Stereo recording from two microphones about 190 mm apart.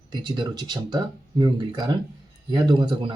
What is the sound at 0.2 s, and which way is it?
Speech, 20° right (ahead or behind).